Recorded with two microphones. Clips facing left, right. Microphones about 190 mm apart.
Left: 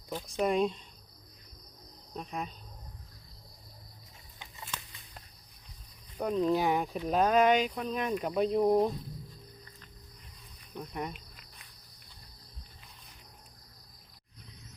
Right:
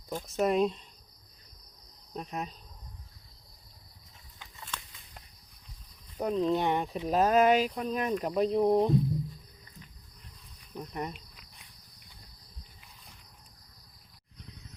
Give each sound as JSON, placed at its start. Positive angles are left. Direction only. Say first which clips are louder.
{"t": 0.2, "sound": "speech", "louder": "right 2 dB", "side_deg": -5}
{"t": 2.1, "sound": "speech", "louder": "right 1 dB", "side_deg": -5}
{"t": 4.4, "sound": "a sound", "louder": "even", "side_deg": 10}
{"t": 6.1, "sound": "speech", "louder": "even", "side_deg": 0}
{"t": 10.8, "sound": "speech", "louder": "right 1 dB", "side_deg": 0}